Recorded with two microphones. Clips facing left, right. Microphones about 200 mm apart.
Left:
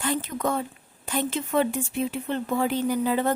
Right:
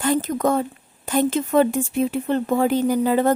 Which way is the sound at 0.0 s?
45° right (ahead or behind).